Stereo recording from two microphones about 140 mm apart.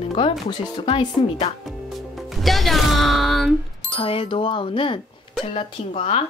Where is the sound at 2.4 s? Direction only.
Centre (ahead or behind).